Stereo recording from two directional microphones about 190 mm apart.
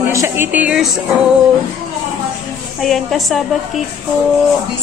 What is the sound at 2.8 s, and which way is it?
A woman's voice, centre (ahead or behind).